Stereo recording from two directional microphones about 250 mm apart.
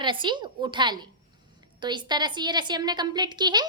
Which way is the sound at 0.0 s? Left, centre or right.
Centre.